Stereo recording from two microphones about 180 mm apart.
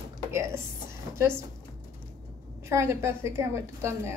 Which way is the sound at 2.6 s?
15° right (ahead or behind).